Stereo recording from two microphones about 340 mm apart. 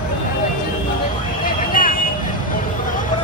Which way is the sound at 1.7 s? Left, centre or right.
Left.